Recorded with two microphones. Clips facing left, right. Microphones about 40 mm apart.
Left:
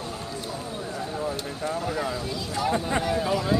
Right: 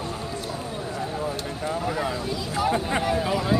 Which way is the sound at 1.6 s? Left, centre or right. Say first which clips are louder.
Right 2 dB; centre.